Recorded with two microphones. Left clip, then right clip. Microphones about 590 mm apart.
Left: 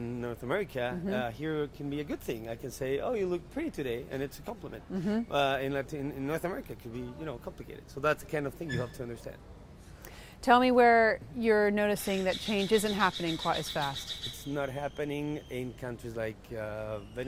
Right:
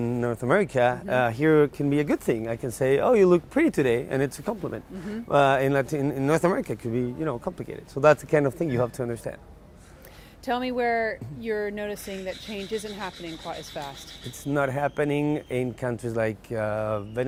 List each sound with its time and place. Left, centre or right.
0.0 s speech: right
10.4 s speech: left
14.5 s speech: right